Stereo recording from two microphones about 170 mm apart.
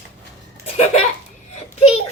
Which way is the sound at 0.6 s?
40° left (ahead or behind).